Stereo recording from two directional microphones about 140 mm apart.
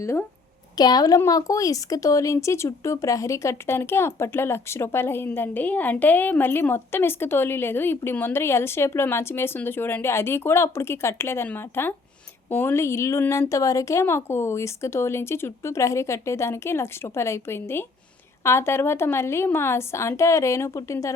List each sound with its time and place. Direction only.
0.0 s speech: 20° left (ahead or behind)